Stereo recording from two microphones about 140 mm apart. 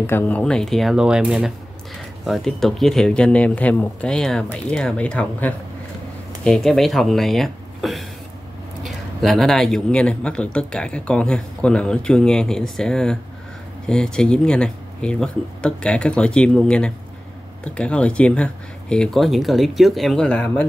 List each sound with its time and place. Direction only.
0.0 s speech: 15° left (ahead or behind)
0.4 s speech: 5° left (ahead or behind)